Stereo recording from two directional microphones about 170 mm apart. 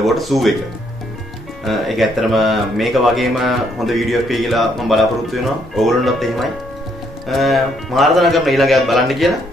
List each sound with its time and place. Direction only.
0.0 s speech: centre (ahead or behind)
1.6 s speech: centre (ahead or behind)